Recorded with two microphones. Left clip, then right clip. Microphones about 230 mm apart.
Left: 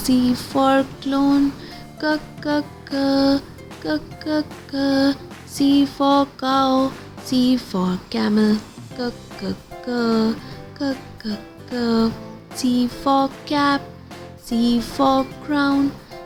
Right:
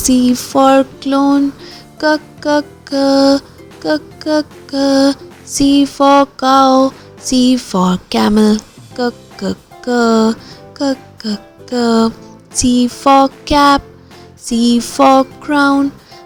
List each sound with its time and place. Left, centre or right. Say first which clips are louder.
0.0 s music: right 7 dB; right
10.8 s a child's voice: right 9 dB; right
12.5 s music: right 8 dB; right